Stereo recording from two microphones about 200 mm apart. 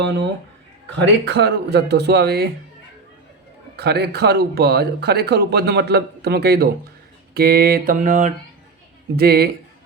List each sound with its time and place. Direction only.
0.9 s speech: 60° right (ahead or behind)
3.8 s speech: 55° right (ahead or behind); by 8.3 s 40° right (ahead or behind)
9.1 s speech: 50° right (ahead or behind)